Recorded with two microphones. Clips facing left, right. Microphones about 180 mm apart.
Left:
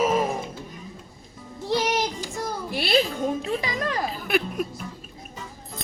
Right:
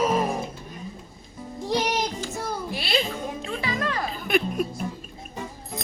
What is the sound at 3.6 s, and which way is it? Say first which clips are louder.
Speech: right 1 dB; 15° left (ahead or behind).